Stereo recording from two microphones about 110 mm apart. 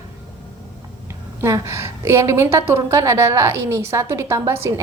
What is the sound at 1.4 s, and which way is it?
A woman's voice, 25° right (ahead or behind).